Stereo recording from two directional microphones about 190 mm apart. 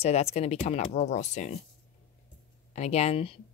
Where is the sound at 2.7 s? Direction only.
35° left (ahead or behind).